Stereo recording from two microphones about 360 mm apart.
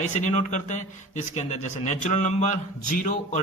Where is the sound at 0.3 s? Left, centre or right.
Centre.